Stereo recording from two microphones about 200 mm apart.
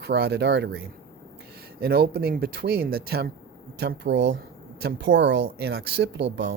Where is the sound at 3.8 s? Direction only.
60° right (ahead or behind).